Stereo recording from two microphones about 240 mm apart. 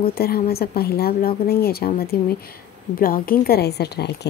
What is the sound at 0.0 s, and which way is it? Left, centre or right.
A woman's voice, left.